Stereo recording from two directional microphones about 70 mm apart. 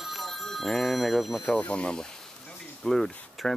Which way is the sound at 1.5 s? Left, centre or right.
Centre.